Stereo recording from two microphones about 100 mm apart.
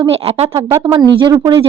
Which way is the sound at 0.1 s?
85° right.